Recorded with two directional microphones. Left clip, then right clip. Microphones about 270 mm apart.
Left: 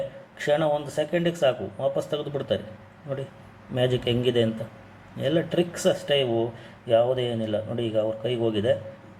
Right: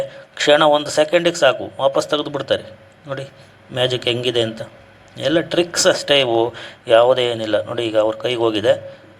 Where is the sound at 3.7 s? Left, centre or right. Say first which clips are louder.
Right 6 dB; right.